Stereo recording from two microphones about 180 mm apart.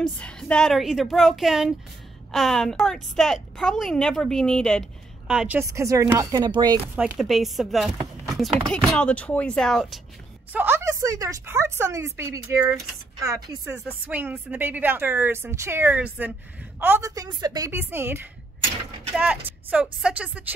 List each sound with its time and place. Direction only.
0.0 s speech: 5° left (ahead or behind)
5.3 s a woman's voice: 5° right (ahead or behind); by 6.8 s 25° right (ahead or behind)
7.0 s speech: centre (ahead or behind)
10.5 s a woman's voice: 10° right (ahead or behind)